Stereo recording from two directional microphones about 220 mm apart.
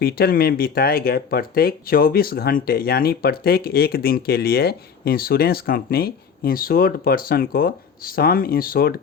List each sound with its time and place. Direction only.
0.0 s speech: 45° left (ahead or behind)